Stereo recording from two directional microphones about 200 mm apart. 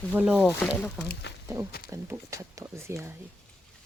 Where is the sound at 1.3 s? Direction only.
60° left (ahead or behind).